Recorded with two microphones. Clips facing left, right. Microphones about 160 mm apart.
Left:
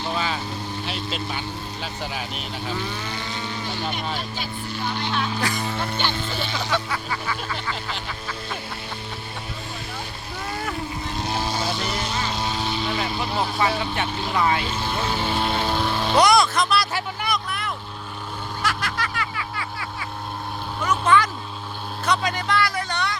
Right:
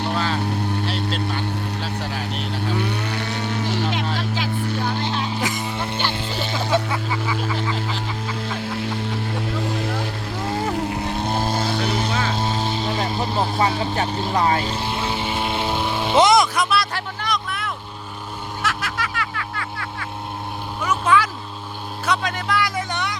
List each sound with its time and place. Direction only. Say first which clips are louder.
0.4 s vehicle: right 7 dB; 65° right (ahead or behind)
1.8 s speech: right 3 dB; 5° left (ahead or behind)
2.7 s vehicle: right 5 dB; 70° right (ahead or behind); by 4.9 s 85° right
4.9 s a sound: right 2 dB; 40° right (ahead or behind); by 6.0 s 20° right (ahead or behind)
6.7 s vehicle: right 6 dB; 20° right (ahead or behind)
9.5 s vehicle: right 10 dB; 90° right
10.8 s vehicle: right 5 dB; 70° right (ahead or behind); by 15.2 s 30° right (ahead or behind)
15.5 s vehicle: right 1 dB; 20° right (ahead or behind)
16.6 s a sound: right 1 dB; 5° right (ahead or behind)
17.2 s vehicle: right 1 dB; 5° left (ahead or behind)
18.6 s music: right 1 dB; centre (ahead or behind)
20.8 s vehicle: even; 5° right (ahead or behind)
22.5 s a sound: right 2 dB; 20° right (ahead or behind)